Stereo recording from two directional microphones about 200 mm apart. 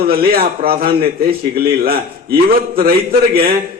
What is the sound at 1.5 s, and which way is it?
A man's voice, 50° right (ahead or behind).